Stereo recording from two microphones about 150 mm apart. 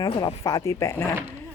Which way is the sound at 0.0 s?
25° left (ahead or behind).